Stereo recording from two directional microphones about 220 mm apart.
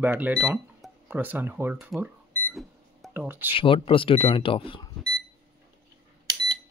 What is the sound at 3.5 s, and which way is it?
Speech, 25° left (ahead or behind).